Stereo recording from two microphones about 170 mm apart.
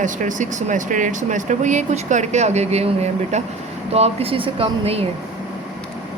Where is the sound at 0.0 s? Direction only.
50° right (ahead or behind).